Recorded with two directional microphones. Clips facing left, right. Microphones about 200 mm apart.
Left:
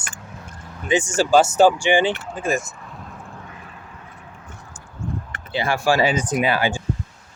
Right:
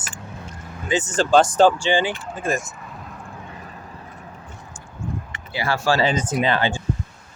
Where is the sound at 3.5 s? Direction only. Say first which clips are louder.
Right 3 dB; 35° right (ahead or behind).